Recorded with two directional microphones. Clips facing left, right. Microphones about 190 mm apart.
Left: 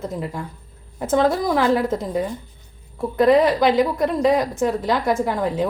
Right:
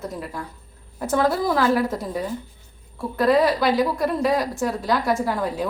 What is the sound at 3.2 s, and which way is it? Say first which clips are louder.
A woman's voice: left 3 dB; 20° left (ahead or behind).